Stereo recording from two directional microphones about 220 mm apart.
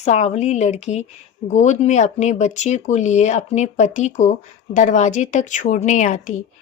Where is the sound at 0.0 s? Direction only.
30° left (ahead or behind).